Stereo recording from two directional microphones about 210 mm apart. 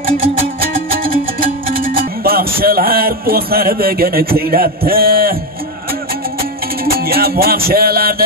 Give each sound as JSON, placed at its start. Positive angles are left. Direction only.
{"t": 1.8, "sound": "music", "side_deg": -45}
{"t": 6.9, "sound": "music", "side_deg": -45}